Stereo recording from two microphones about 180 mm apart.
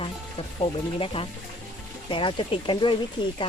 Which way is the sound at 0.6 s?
30° left (ahead or behind).